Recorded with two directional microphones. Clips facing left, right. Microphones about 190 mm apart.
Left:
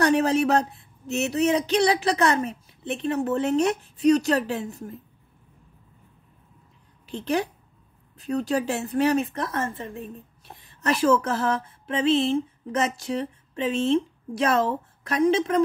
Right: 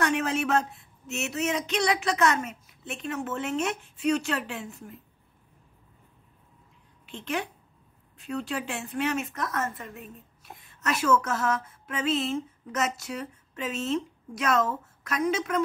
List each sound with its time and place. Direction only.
0.0 s speech: 35° left (ahead or behind)
7.1 s speech: 40° left (ahead or behind)